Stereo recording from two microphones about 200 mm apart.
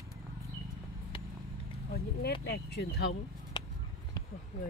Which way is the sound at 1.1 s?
25° left (ahead or behind).